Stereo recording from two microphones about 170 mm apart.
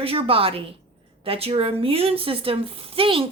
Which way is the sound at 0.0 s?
35° right (ahead or behind).